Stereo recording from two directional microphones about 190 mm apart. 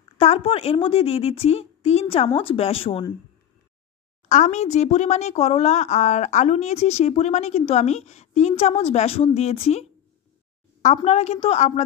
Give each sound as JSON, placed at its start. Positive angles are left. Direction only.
{"t": 0.2, "sound": "speech", "side_deg": 30}
{"t": 4.3, "sound": "speech", "side_deg": 40}
{"t": 11.1, "sound": "speech", "side_deg": 35}